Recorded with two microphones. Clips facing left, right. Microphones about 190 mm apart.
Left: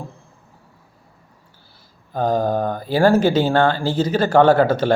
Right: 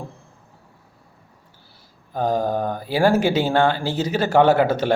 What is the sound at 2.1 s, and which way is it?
Speech, 10° right (ahead or behind).